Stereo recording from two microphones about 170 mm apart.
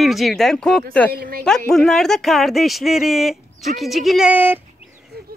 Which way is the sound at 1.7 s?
Centre (ahead or behind).